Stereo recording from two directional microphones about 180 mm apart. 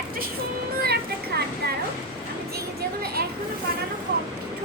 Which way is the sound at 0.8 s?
60° right (ahead or behind).